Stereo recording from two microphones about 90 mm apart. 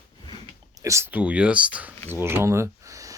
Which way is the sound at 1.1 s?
15° right (ahead or behind).